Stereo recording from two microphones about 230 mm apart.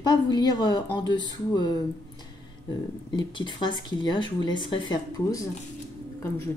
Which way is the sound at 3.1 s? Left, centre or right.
Left.